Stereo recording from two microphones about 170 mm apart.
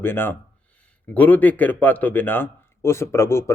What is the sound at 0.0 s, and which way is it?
Speech, 10° left (ahead or behind).